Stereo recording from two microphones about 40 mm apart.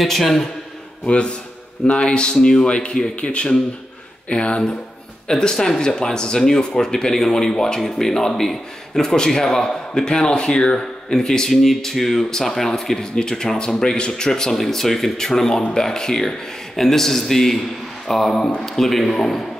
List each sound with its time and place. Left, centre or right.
0.0 s a man's voice: centre
1.0 s speech: left
5.3 s a man's voice: centre